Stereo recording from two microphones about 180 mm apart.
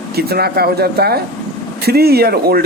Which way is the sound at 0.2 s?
60° right (ahead or behind).